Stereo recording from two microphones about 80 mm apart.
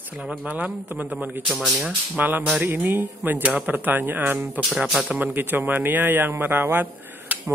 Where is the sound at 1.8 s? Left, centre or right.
Centre.